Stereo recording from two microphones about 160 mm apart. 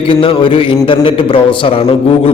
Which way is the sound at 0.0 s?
30° left (ahead or behind).